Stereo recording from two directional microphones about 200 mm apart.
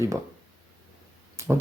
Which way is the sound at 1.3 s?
10° right (ahead or behind).